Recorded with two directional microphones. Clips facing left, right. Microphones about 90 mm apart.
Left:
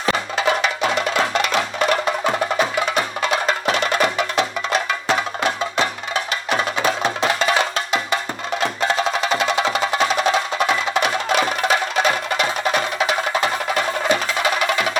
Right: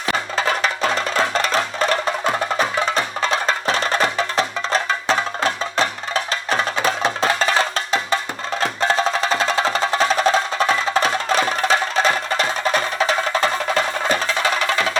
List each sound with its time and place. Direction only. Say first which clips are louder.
0.3 s music: even; 40° right (ahead or behind)
6.5 s music: even; 35° right (ahead or behind)